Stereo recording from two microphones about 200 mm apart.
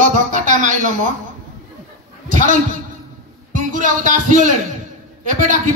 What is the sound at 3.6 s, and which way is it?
Speech, 40° right (ahead or behind).